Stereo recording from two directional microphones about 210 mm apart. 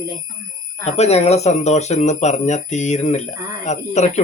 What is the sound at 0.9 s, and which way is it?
Speech, 30° left (ahead or behind).